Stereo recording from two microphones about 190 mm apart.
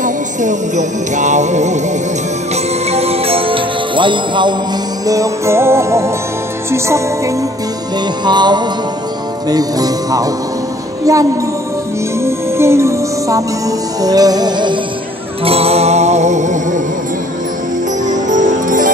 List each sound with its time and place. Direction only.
0.0 s music: 40° right (ahead or behind)
18.0 s music: 40° right (ahead or behind)